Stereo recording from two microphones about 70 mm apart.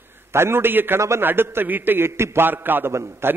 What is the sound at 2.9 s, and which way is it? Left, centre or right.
Speech, right.